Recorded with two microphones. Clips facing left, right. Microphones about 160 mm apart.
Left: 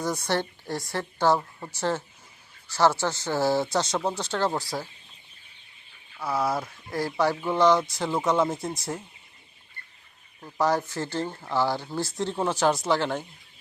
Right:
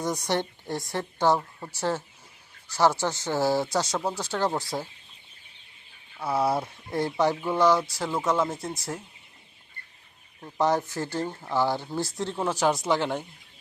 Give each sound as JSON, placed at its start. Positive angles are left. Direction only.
{"t": 0.0, "sound": "a woman's voice", "side_deg": -20}
{"t": 1.4, "sound": "speech", "side_deg": 0}
{"t": 1.7, "sound": "speech", "side_deg": -10}
{"t": 6.1, "sound": "speech", "side_deg": -25}
{"t": 10.6, "sound": "speech", "side_deg": -15}
{"t": 12.1, "sound": "speech", "side_deg": 5}
{"t": 12.5, "sound": "speech", "side_deg": -10}